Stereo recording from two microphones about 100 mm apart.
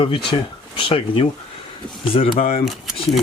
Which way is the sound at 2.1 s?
80° left.